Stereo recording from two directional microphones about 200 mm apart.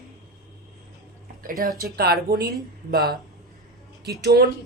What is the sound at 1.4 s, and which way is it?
Speech, 45° right (ahead or behind).